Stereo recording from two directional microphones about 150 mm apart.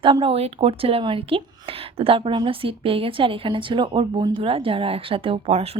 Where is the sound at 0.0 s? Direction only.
35° right (ahead or behind).